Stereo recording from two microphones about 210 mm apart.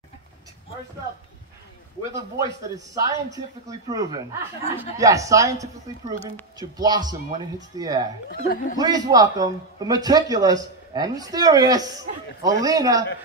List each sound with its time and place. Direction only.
2.1 s a man's voice: 15° right (ahead or behind)
8.3 s speech: 50° left (ahead or behind)
8.7 s a man's voice: 20° right (ahead or behind)